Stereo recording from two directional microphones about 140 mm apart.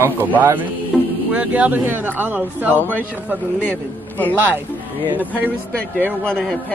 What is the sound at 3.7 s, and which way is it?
Speech, 15° left (ahead or behind).